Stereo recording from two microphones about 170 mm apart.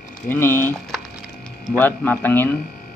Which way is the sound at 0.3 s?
15° left (ahead or behind).